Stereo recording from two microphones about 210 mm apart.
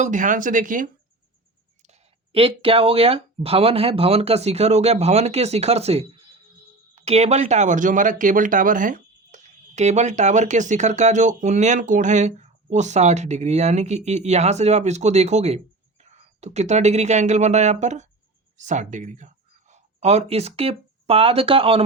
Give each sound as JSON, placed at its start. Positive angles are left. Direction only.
{"t": 0.0, "sound": "speech", "side_deg": -35}
{"t": 1.9, "sound": "speech", "side_deg": -25}